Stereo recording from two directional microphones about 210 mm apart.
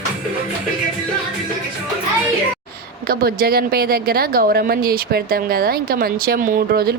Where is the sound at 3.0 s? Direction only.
45° right (ahead or behind).